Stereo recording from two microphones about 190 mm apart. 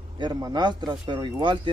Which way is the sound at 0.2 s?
20° right (ahead or behind).